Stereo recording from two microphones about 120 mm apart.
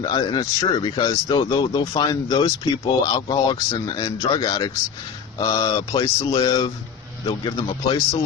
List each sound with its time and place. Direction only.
0.0 s speech: 35° left (ahead or behind)
7.3 s speech: 40° left (ahead or behind)